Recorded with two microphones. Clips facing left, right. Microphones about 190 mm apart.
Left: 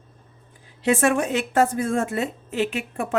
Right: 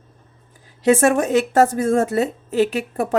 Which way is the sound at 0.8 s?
40° right (ahead or behind).